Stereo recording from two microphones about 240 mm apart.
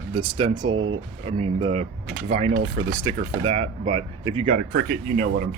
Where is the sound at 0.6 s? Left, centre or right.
Right.